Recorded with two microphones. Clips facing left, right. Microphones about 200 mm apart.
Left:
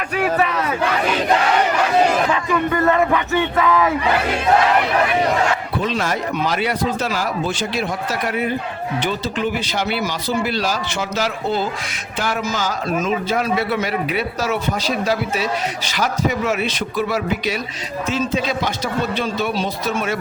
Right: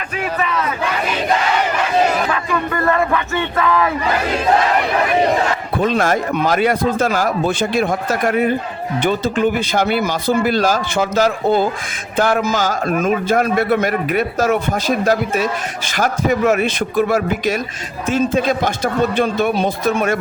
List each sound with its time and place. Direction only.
2.3 s speech: 20° left (ahead or behind)
5.7 s speech: 50° right (ahead or behind)